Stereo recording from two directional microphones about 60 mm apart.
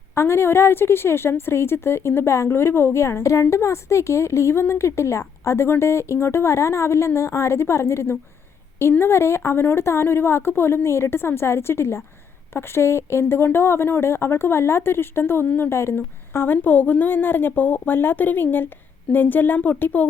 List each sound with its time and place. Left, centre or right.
0.1 s a woman's voice: left
15.4 s a woman's voice: left
15.7 s a woman's voice: left